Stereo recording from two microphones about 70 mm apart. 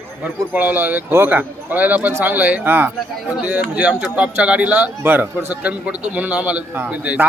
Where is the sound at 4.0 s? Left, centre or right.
Centre.